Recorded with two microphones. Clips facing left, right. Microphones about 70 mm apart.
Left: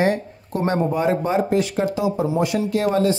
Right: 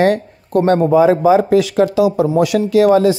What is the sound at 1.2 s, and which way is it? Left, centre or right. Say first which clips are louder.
Speech: right 8 dB; right.